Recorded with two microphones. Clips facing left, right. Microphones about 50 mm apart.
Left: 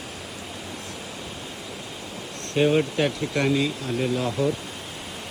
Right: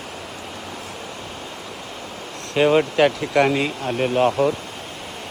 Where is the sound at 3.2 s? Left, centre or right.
Right.